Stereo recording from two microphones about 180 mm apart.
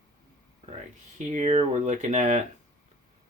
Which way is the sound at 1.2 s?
40° right (ahead or behind).